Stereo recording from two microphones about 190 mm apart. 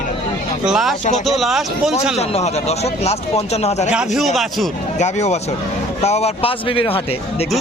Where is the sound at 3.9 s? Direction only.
5° right (ahead or behind).